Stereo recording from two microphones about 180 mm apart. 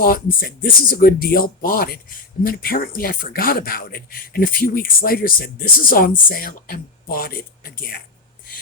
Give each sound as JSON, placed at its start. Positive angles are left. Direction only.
{"t": 0.0, "sound": "speech", "side_deg": 55}